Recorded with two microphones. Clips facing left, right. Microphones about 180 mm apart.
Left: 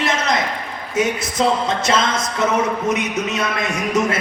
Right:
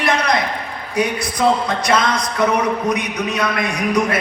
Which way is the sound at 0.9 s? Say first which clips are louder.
Left 1 dB; 20° left (ahead or behind).